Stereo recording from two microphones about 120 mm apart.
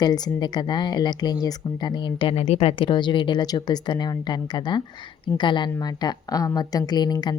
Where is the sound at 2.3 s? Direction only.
60° left (ahead or behind).